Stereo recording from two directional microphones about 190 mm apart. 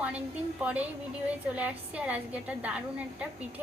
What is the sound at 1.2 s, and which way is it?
A woman's voice, 5° right (ahead or behind).